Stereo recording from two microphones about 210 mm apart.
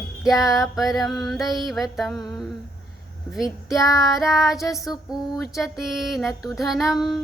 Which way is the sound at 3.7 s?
15° left (ahead or behind).